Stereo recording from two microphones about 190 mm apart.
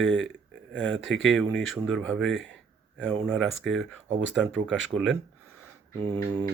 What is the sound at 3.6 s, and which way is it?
Speech, centre (ahead or behind).